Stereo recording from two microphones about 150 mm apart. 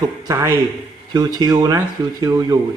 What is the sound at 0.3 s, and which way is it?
A man's voice, 20° right (ahead or behind).